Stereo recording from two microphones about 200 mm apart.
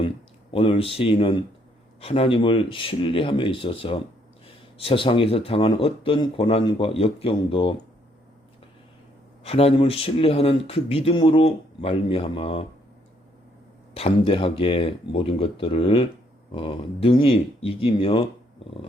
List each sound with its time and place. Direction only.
0.5 s speech: 25° left (ahead or behind)
9.4 s speech: 30° left (ahead or behind)
13.9 s speech: 25° left (ahead or behind)